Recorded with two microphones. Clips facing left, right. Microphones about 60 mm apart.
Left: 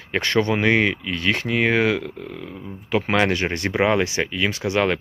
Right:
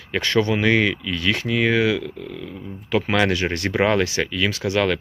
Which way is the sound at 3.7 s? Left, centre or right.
Centre.